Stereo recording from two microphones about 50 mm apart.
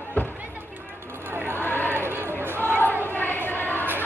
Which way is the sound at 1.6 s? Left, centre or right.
Left.